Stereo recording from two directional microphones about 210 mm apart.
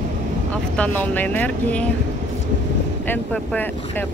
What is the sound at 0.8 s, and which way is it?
Speech, 5° left (ahead or behind).